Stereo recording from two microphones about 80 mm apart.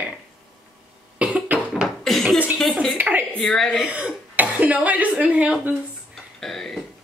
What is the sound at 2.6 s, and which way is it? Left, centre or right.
Speech, centre.